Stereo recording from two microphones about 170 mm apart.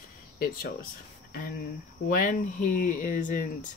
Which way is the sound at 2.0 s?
50° left (ahead or behind).